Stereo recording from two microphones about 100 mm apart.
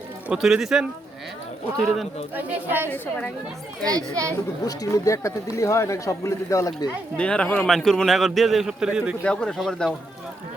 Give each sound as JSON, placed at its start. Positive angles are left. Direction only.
{"t": 0.3, "sound": "a man's voice", "side_deg": -5}
{"t": 2.3, "sound": "a woman's voice", "side_deg": -20}
{"t": 2.9, "sound": "speech", "side_deg": 15}
{"t": 3.8, "sound": "a child's voice", "side_deg": -35}
{"t": 4.6, "sound": "speech", "side_deg": 35}
{"t": 7.2, "sound": "speech", "side_deg": 10}
{"t": 7.7, "sound": "a man's voice", "side_deg": 5}
{"t": 9.2, "sound": "speech", "side_deg": 5}